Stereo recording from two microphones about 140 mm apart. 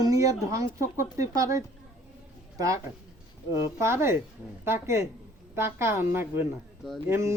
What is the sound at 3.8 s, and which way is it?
A woman's voice, 20° right (ahead or behind).